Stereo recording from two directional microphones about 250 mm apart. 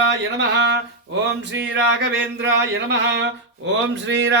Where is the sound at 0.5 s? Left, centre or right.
Right.